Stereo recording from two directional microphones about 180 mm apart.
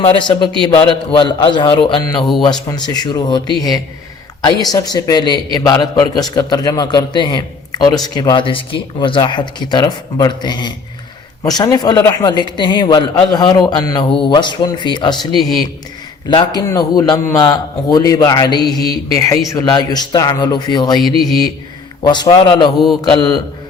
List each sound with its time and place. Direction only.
0.0 s a man's voice: 25° left (ahead or behind)
15.4 s speech: centre (ahead or behind)
16.3 s a man's voice: 25° left (ahead or behind)
22.0 s a man's voice: 25° left (ahead or behind)